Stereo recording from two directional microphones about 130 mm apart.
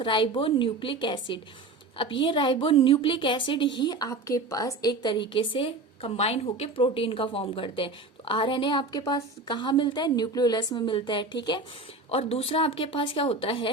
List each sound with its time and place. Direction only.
0.0 s a woman's voice: 40° left (ahead or behind)
12.1 s speech: 50° left (ahead or behind)